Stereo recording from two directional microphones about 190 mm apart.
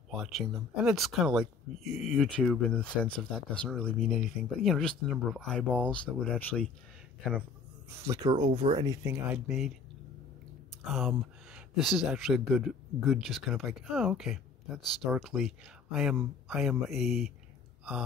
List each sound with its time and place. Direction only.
0.1 s speech: centre (ahead or behind)
8.0 s speech: 15° right (ahead or behind)
8.5 s speech: 35° right (ahead or behind)
8.8 s speech: 20° right (ahead or behind)
9.3 s speech: 5° right (ahead or behind)
10.8 s speech: centre (ahead or behind)